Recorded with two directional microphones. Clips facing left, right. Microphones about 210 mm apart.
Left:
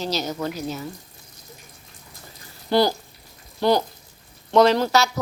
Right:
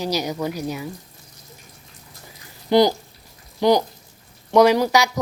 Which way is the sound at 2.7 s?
15° right (ahead or behind).